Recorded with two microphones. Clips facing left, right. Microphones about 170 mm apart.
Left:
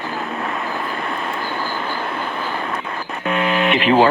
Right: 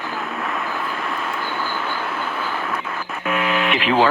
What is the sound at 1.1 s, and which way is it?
Vehicle, 30° left (ahead or behind).